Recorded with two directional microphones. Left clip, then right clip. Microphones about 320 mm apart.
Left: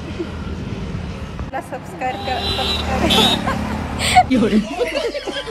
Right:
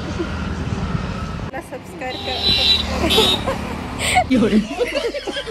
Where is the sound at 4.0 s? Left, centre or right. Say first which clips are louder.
Left 3 dB; centre.